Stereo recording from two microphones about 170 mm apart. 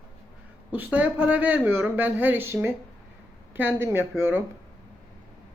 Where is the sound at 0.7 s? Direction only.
10° right (ahead or behind).